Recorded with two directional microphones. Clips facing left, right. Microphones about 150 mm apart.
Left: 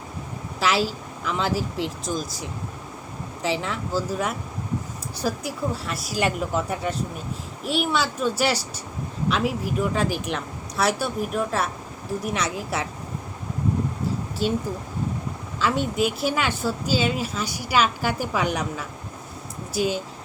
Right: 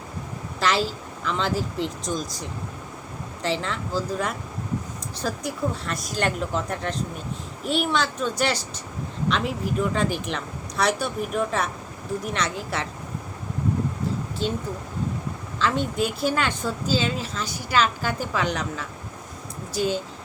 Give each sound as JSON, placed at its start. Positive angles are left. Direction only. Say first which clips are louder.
{"t": 0.6, "sound": "a woman's voice", "louder": "left 1 dB", "side_deg": 5}
{"t": 14.4, "sound": "a woman's voice", "louder": "left 4 dB", "side_deg": 10}